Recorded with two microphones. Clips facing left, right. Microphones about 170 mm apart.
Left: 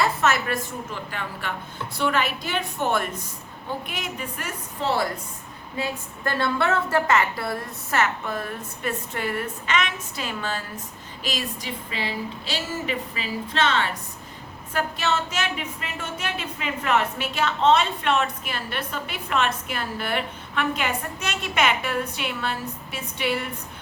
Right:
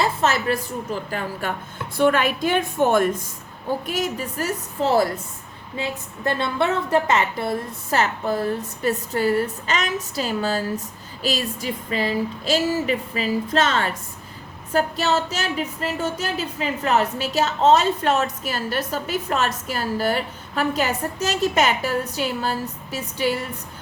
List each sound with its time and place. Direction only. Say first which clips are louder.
0.0 s a woman's voice: right 2 dB; 30° right (ahead or behind)
5.7 s a woman's voice: right 1 dB; 25° right (ahead or behind)